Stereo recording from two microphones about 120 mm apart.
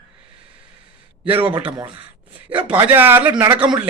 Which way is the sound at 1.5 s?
15° right (ahead or behind).